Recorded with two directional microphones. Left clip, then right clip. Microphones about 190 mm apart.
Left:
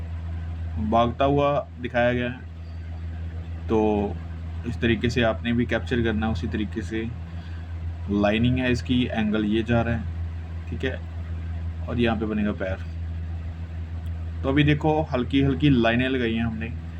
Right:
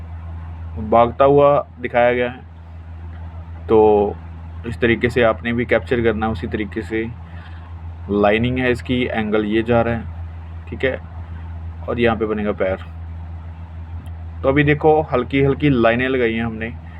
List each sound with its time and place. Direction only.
0.9 s speech: 15° right (ahead or behind)
3.7 s a sound: 20° right (ahead or behind)
4.8 s speech: 20° right (ahead or behind)
8.1 s speech: 20° right (ahead or behind)
14.4 s speech: 15° right (ahead or behind)